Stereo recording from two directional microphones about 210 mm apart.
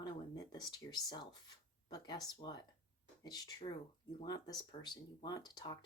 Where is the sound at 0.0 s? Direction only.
20° left (ahead or behind).